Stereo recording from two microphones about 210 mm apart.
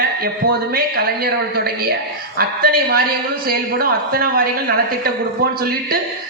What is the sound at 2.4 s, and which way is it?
A woman's voice, 45° right (ahead or behind).